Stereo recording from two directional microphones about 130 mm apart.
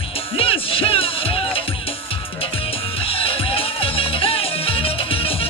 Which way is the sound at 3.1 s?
45° left (ahead or behind).